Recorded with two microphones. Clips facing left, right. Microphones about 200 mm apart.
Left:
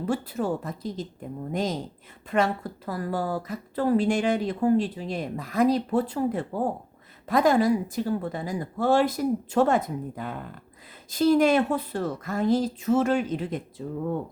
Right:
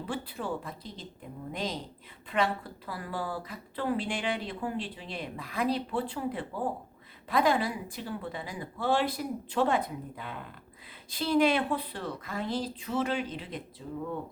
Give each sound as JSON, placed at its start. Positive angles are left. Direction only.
{"t": 0.0, "sound": "a woman's voice", "side_deg": 45}